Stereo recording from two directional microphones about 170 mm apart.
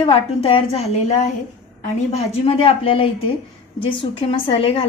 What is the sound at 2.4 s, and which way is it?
A woman's voice, 35° left (ahead or behind).